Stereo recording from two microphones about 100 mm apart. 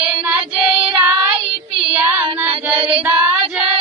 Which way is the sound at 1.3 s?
65° right (ahead or behind).